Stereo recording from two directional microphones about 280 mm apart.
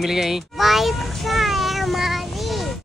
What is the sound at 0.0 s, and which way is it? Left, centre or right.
A child's voice, centre.